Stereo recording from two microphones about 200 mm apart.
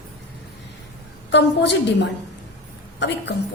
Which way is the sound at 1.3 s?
60° left (ahead or behind).